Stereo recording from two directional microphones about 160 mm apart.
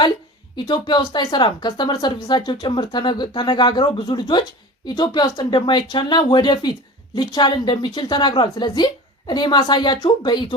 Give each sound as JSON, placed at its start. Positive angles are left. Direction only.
{"t": 0.5, "sound": "speech", "side_deg": 25}